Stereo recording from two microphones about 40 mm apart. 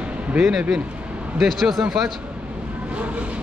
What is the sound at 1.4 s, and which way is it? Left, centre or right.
Speech, centre.